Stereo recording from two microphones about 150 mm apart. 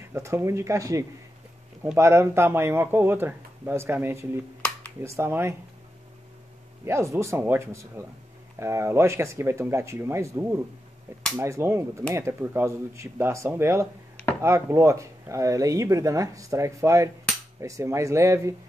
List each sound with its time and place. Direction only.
0.0 s speech: 20° right (ahead or behind)
4.6 s a sound: 10° left (ahead or behind)
5.0 s speech: 20° right (ahead or behind)
6.8 s speech: 20° right (ahead or behind)